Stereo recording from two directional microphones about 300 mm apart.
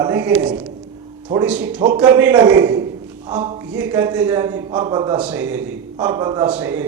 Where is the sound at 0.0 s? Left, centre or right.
Centre.